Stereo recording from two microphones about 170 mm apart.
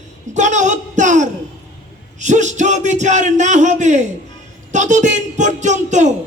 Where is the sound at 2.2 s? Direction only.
45° right (ahead or behind).